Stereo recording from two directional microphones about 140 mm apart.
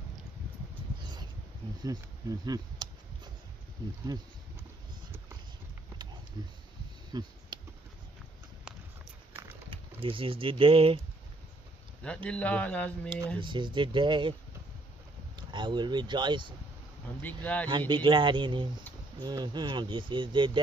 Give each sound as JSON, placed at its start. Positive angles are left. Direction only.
{"t": 1.8, "sound": "speech", "side_deg": -25}
{"t": 7.1, "sound": "clicking", "side_deg": -30}
{"t": 10.0, "sound": "speech", "side_deg": -40}
{"t": 12.0, "sound": "speech", "side_deg": 5}
{"t": 13.4, "sound": "speech", "side_deg": -35}
{"t": 15.3, "sound": "speech", "side_deg": -30}
{"t": 17.2, "sound": "speech", "side_deg": 10}
{"t": 17.6, "sound": "speech", "side_deg": -30}